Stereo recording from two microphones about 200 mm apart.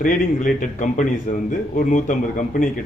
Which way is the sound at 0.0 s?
40° left (ahead or behind).